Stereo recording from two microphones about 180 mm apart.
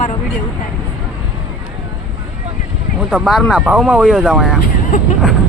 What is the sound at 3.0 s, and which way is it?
Speech, centre (ahead or behind).